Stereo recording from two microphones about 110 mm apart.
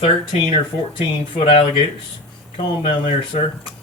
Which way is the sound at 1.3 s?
55° left (ahead or behind).